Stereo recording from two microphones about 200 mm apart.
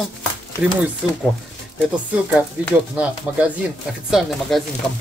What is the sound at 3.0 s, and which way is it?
Speech, 5° right (ahead or behind).